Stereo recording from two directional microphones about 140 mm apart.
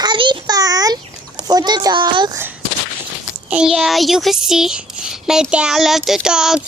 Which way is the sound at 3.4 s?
5° right (ahead or behind).